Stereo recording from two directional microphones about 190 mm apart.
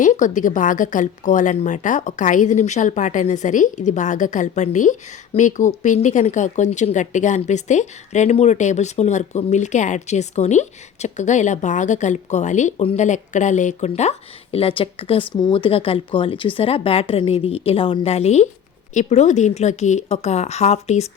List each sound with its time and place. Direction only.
0.0 s speech: 40° left (ahead or behind)